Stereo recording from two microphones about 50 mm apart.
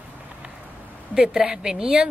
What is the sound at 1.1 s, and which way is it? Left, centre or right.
Speech, centre.